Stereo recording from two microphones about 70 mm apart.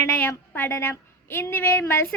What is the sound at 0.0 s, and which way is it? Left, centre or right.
A woman's voice, left.